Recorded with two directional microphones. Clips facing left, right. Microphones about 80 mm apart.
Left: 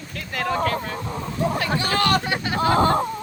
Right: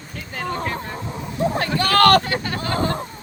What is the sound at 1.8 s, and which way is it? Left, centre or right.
Vehicle, right.